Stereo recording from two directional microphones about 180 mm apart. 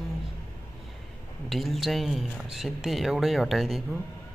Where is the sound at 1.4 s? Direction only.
Centre (ahead or behind).